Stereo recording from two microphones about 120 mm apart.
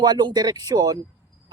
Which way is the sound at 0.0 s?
35° right (ahead or behind).